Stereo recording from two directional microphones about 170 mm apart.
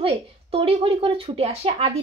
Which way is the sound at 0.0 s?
35° right (ahead or behind).